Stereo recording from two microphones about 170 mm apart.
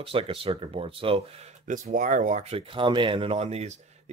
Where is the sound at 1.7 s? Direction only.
50° right (ahead or behind).